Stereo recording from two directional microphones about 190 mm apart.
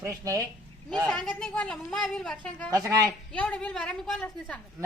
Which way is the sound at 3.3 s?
5° left (ahead or behind).